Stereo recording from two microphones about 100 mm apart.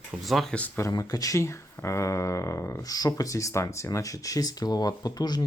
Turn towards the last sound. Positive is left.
turn(degrees=45)  # may be behind; listen again after turning